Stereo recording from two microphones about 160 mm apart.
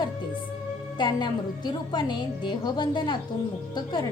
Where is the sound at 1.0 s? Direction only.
25° left (ahead or behind).